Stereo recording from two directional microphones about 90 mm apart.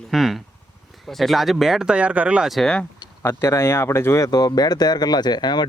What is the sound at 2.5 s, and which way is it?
Speech, 5° left (ahead or behind).